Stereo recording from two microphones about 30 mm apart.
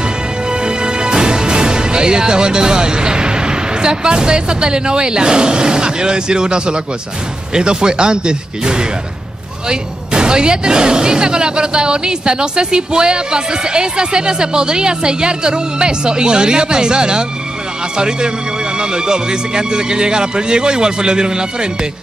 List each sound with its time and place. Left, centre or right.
0.5 s speech: right